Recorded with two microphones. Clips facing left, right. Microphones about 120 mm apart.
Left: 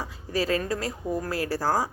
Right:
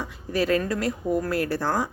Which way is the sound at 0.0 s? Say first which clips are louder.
Right 2 dB; 35° left (ahead or behind).